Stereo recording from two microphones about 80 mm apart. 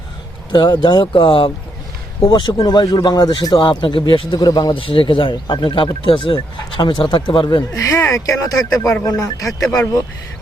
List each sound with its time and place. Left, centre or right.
0.5 s speech: left
2.2 s speech: left
3.6 s speech: left
4.4 s speech: left
7.7 s speech: left